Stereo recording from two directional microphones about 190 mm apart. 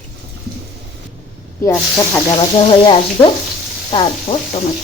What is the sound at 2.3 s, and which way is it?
Frying, 30° left (ahead or behind).